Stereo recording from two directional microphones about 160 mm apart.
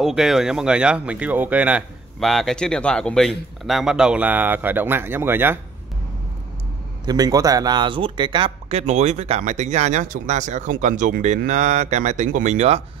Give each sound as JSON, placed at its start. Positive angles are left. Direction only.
{"t": 0.0, "sound": "speech", "side_deg": 0}
{"t": 7.1, "sound": "speech", "side_deg": -25}